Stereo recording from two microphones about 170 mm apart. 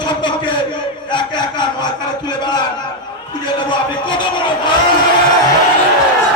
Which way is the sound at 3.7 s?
30° left (ahead or behind).